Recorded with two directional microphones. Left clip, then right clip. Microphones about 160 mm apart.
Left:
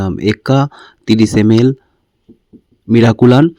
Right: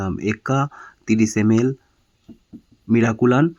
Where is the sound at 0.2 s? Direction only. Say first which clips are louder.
Left 9 dB; 30° left (ahead or behind).